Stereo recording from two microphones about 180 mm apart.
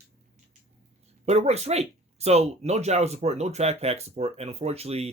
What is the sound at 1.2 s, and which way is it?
Speech, 35° right (ahead or behind).